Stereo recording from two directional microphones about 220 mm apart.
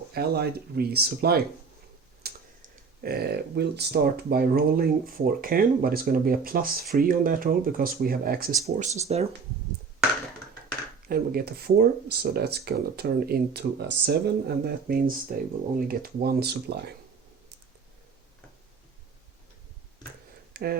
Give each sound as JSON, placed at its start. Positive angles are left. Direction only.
{"t": 0.1, "sound": "speech", "side_deg": -45}
{"t": 8.6, "sound": "speech", "side_deg": -30}
{"t": 11.1, "sound": "speech", "side_deg": -45}
{"t": 20.5, "sound": "a sound", "side_deg": -45}